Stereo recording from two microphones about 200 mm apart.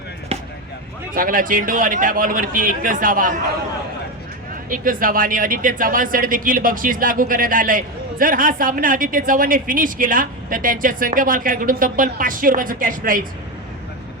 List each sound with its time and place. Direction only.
1.1 s speech: 45° right (ahead or behind)
4.7 s speech: 45° right (ahead or behind)